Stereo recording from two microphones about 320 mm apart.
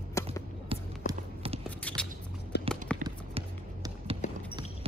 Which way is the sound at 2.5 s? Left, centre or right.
Left.